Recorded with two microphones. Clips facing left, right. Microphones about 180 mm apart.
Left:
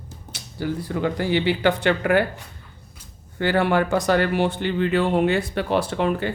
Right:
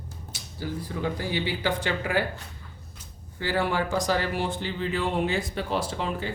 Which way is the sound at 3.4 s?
65° left (ahead or behind).